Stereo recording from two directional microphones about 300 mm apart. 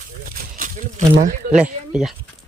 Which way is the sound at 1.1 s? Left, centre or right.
Right.